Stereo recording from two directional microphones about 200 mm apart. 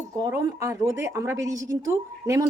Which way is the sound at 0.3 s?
15° right (ahead or behind).